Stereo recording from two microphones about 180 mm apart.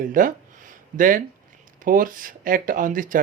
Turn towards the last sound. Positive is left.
turn(degrees=-45)  # may be behind; listen again after turning